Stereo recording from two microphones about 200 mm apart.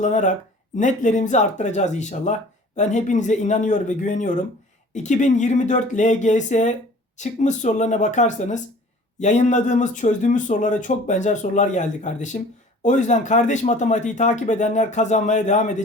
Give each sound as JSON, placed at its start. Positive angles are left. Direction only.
{"t": 0.0, "sound": "speech", "side_deg": 35}